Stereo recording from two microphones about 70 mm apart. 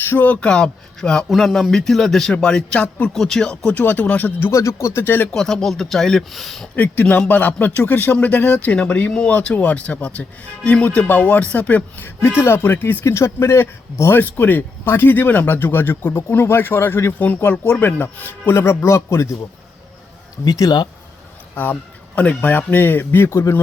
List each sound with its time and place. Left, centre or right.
0.0 s a man's voice: left
0.3 s speech: centre
1.3 s a man's voice: centre; by 4.3 s left
4.5 s speech: left
5.3 s speech: centre
6.7 s a man's voice: left
13.1 s speech: left
20.4 s speech: left
21.5 s a man's voice: left